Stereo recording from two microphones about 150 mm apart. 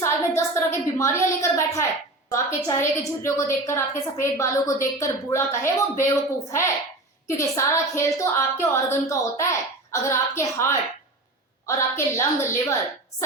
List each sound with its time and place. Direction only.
0.0 s a woman's voice: 20° left (ahead or behind)